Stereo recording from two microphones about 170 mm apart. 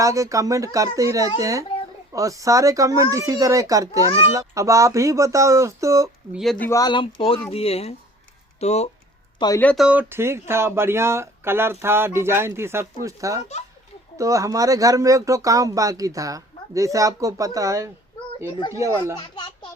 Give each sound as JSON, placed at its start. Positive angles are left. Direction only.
{"t": 0.0, "sound": "speech", "side_deg": -20}
{"t": 6.3, "sound": "speech", "side_deg": 0}
{"t": 6.7, "sound": "speech", "side_deg": 20}
{"t": 9.6, "sound": "speech", "side_deg": 5}
{"t": 9.8, "sound": "speech", "side_deg": -10}